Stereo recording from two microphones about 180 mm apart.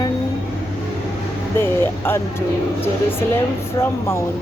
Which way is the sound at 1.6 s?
10° left (ahead or behind).